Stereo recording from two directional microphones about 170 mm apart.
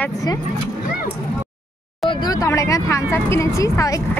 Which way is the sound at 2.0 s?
20° left (ahead or behind).